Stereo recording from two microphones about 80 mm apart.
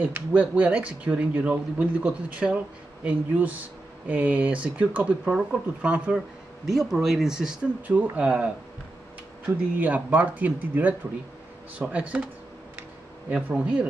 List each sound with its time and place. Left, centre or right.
0.0 s speech: centre
6.6 s speech: centre
7.8 s speech: centre
9.8 s speech: centre
13.3 s speech: centre